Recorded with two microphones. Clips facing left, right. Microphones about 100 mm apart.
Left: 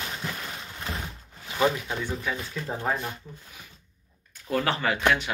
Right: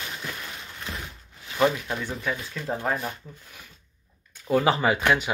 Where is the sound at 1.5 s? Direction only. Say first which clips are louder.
Right 2 dB; centre (ahead or behind).